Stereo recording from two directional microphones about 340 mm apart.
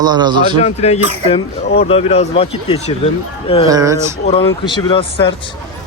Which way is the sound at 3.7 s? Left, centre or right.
Centre.